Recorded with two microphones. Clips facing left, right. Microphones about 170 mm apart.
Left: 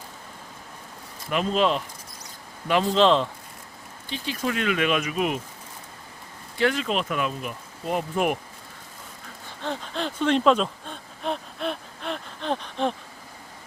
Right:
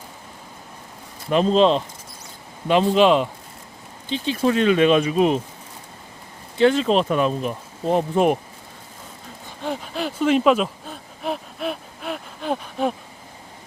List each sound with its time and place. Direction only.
1.3 s speech: 30° right (ahead or behind); by 3.2 s 15° right (ahead or behind)
4.1 s speech: 25° right (ahead or behind)
6.6 s speech: 25° right (ahead or behind)
9.6 s gasp: 10° right (ahead or behind)